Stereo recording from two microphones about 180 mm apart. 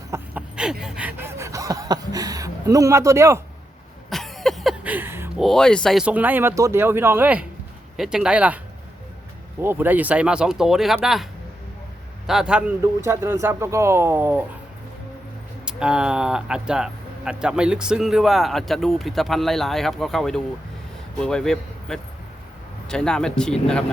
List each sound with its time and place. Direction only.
0.1 s a sound: 5° right (ahead or behind)
4.1 s cough: centre (ahead or behind)
5.4 s speech: centre (ahead or behind)
9.6 s a man's voice: 10° right (ahead or behind)
13.0 s speech: 15° right (ahead or behind)
15.6 s speech: 5° right (ahead or behind)